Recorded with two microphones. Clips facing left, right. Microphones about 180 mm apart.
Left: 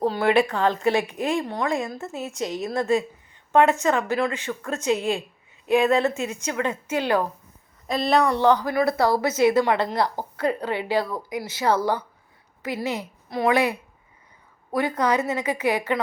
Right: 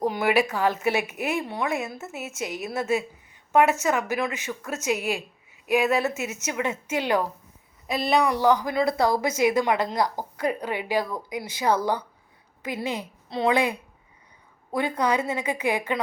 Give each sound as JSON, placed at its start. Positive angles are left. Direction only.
{"t": 0.0, "sound": "a woman's voice", "side_deg": -15}
{"t": 3.5, "sound": "a woman's voice", "side_deg": -15}
{"t": 14.8, "sound": "a woman's voice", "side_deg": -10}